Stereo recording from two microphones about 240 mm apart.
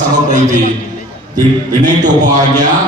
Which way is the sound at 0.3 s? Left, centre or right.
Right.